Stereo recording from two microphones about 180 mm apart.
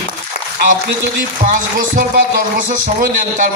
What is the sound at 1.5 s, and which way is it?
A man's voice, 50° right (ahead or behind).